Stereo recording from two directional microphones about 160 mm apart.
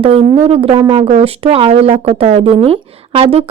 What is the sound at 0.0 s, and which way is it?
A woman's voice, 35° right (ahead or behind).